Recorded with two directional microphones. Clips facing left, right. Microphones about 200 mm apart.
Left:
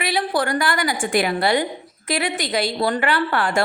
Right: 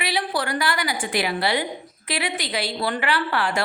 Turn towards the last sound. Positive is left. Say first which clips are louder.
# left 3 dB
turn(degrees=50)  # may be behind; listen again after turning